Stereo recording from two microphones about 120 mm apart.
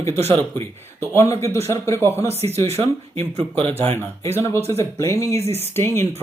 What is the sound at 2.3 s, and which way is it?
Speech, 60° right (ahead or behind).